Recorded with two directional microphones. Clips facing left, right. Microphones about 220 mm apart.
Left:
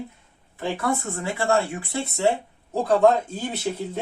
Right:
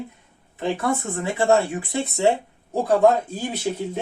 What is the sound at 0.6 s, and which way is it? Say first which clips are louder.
Speech: right 2 dB; 20° right (ahead or behind).